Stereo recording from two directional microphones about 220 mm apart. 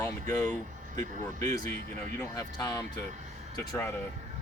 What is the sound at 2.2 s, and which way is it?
Speech, 15° left (ahead or behind).